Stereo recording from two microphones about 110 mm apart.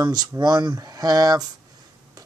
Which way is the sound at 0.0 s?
40° right (ahead or behind).